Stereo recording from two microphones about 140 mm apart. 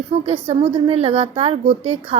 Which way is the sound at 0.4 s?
45° right (ahead or behind).